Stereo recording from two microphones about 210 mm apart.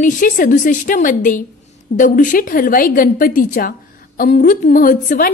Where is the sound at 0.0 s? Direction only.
40° left (ahead or behind).